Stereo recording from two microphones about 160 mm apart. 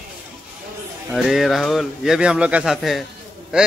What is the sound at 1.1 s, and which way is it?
Speech, centre (ahead or behind).